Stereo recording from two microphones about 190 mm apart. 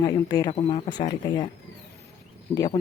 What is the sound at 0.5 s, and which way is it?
Speech, 30° left (ahead or behind).